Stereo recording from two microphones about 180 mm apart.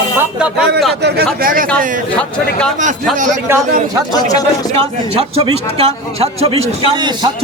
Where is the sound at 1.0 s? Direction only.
65° right (ahead or behind).